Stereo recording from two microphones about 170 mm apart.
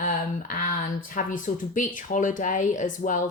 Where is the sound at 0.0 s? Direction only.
55° left (ahead or behind).